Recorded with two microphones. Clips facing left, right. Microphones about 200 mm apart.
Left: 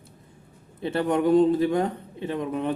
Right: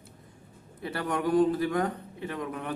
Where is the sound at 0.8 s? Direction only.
25° left (ahead or behind).